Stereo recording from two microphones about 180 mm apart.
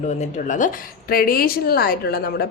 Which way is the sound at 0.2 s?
45° left (ahead or behind).